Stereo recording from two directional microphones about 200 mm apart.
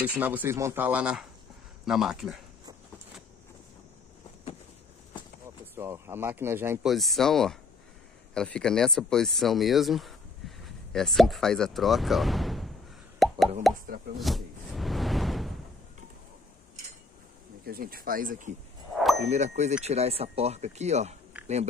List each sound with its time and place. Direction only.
0.0 s speech: 10° right (ahead or behind)
5.8 s speech: 10° right (ahead or behind)
13.2 s plop: centre (ahead or behind)
13.7 s speech: centre (ahead or behind)
14.2 s music: centre (ahead or behind)
17.6 s speech: 50° right (ahead or behind)